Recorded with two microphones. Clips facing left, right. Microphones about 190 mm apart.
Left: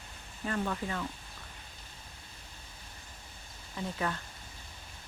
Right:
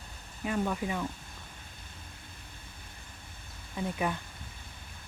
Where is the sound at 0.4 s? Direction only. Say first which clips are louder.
Right 3 dB; 10° right (ahead or behind).